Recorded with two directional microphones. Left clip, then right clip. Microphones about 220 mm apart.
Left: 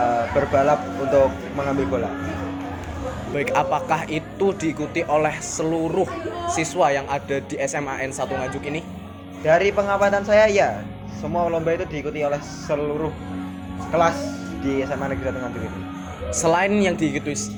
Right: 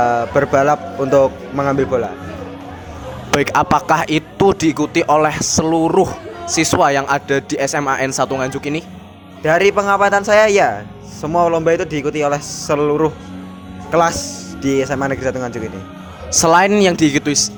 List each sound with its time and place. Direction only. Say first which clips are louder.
0.0 s speech: right 5 dB; 50° right (ahead or behind)
3.5 s a man's voice: right 5 dB; 50° right (ahead or behind)
7.7 s speech: right 9 dB; 35° right (ahead or behind)
8.2 s a man's voice: right 7 dB; 50° right (ahead or behind)
16.4 s a man's voice: right 8 dB; 50° right (ahead or behind)